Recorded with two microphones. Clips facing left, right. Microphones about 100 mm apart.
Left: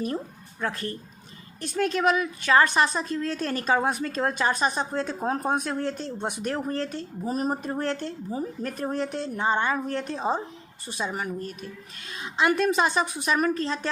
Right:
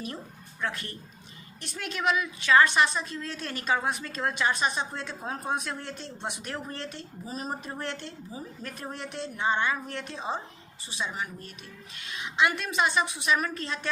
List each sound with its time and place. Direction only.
0.6 s a woman's voice: 35° left (ahead or behind)